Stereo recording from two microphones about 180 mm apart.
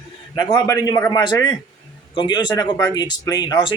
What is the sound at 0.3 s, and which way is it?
A man's voice, 20° left (ahead or behind).